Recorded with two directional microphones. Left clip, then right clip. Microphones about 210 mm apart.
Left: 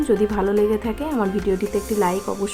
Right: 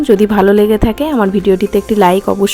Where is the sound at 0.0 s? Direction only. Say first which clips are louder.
Right 10 dB; 40° right (ahead or behind).